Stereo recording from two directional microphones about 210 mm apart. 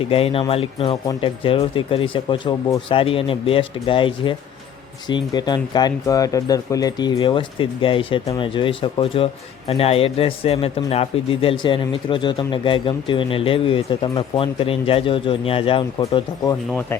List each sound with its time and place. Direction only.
0.0 s speech: 25° left (ahead or behind)